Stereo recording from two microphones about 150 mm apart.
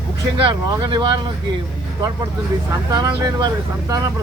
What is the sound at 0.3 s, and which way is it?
Speech, 35° right (ahead or behind).